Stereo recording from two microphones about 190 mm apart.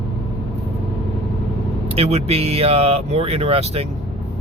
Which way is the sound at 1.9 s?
35° right (ahead or behind).